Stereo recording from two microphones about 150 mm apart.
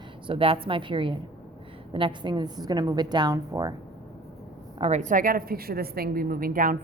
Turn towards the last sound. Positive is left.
turn(degrees=-70)  # may be behind; listen again after turning